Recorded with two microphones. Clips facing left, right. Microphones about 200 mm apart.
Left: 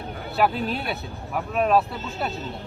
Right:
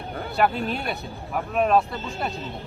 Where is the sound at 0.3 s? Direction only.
Centre (ahead or behind).